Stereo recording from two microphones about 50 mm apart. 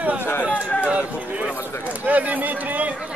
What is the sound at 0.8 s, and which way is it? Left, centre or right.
Speech, right.